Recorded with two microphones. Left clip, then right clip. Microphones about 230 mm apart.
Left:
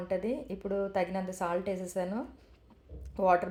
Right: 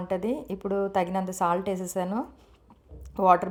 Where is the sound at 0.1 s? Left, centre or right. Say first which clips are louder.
Right 4 dB; right.